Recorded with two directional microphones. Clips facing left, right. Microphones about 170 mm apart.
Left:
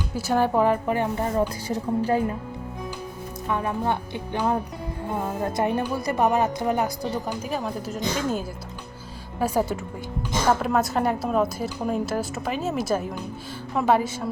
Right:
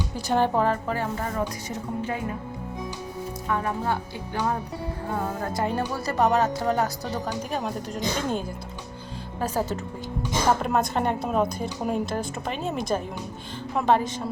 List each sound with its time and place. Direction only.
0.2 s speech: 5° left (ahead or behind); by 2.2 s 35° left (ahead or behind)
3.5 s speech: 20° left (ahead or behind)
5.1 s a woman's voice: 20° left (ahead or behind)